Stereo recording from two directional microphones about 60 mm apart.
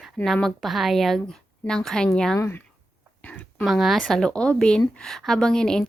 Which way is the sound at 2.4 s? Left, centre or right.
Left.